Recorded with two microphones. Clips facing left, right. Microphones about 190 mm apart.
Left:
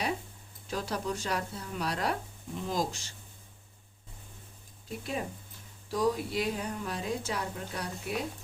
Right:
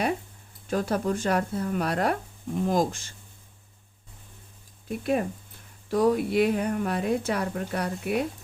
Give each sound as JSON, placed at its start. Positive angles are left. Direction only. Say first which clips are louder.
{"t": 0.7, "sound": "speech", "louder": "right 8 dB", "side_deg": -55}
{"t": 4.9, "sound": "a woman's voice", "louder": "right 9 dB", "side_deg": -60}